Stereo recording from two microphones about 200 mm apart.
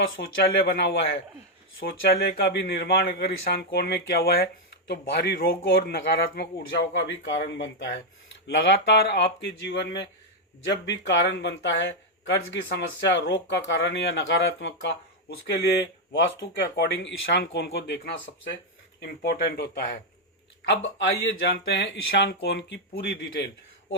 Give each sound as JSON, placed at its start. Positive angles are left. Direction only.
{"t": 0.2, "sound": "a man's voice", "side_deg": 55}